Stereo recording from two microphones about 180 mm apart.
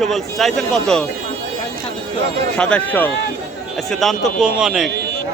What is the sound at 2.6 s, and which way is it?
A man's voice, 5° left (ahead or behind).